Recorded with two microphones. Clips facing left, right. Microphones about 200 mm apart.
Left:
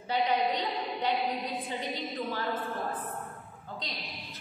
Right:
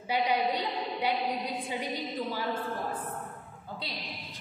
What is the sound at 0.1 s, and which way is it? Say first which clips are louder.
A woman's voice: even; 10° right (ahead or behind).